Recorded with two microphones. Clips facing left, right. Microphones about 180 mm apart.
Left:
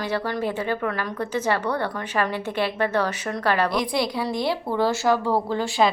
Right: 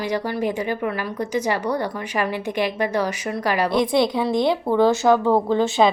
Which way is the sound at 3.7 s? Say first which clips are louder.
Right 5 dB; 25° right (ahead or behind).